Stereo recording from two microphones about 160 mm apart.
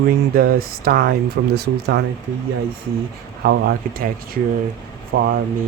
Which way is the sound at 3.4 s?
80° right.